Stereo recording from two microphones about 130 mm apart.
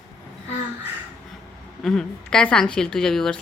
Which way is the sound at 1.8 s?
5° left (ahead or behind).